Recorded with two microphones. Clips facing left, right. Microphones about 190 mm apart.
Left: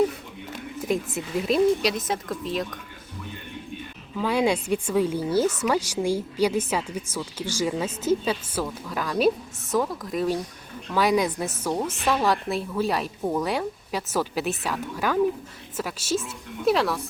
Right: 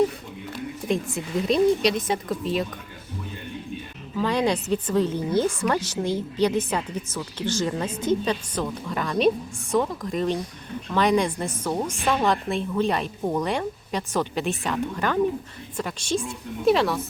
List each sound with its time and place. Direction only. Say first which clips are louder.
0.9 s a woman's voice: even; 5° left (ahead or behind)
4.2 s a woman's voice: even; 10° left (ahead or behind)